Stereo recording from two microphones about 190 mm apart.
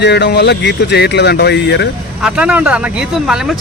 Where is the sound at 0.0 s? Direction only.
65° left (ahead or behind).